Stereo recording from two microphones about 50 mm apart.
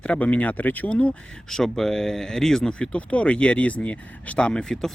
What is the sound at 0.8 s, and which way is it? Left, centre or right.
Speech, left.